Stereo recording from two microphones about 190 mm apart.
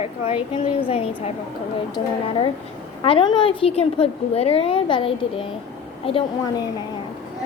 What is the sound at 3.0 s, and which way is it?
A woman's voice, 25° left (ahead or behind).